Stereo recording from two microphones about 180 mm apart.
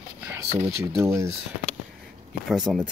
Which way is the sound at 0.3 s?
15° right (ahead or behind).